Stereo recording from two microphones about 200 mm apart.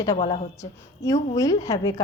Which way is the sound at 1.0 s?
15° left (ahead or behind).